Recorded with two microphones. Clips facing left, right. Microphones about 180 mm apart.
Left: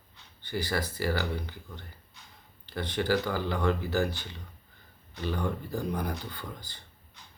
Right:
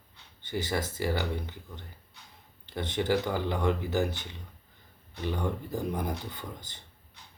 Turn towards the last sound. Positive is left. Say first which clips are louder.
# even
turn(degrees=-20)  # may be behind; listen again after turning